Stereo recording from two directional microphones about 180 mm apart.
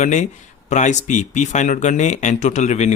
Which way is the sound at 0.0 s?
40° left (ahead or behind).